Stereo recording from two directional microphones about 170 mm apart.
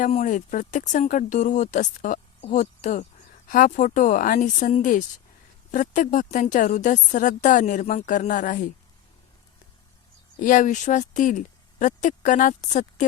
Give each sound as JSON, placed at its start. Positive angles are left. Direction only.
{"t": 0.0, "sound": "speech", "side_deg": 45}
{"t": 10.4, "sound": "speech", "side_deg": 50}